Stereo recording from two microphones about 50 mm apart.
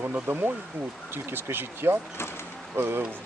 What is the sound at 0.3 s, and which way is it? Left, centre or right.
Speech, right.